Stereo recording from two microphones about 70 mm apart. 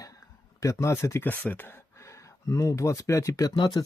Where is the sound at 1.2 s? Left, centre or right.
Left.